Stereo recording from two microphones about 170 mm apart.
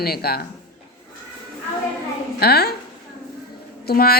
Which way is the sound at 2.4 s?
70° left (ahead or behind).